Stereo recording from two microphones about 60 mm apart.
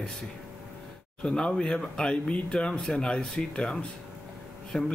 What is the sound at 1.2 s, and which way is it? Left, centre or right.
Speech, centre.